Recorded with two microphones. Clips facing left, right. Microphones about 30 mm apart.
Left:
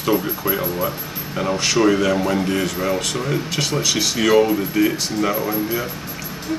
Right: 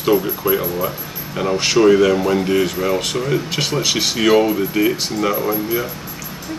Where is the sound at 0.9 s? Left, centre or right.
Centre.